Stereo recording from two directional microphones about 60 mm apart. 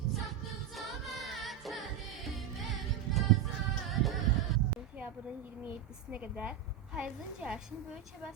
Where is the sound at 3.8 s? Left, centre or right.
Centre.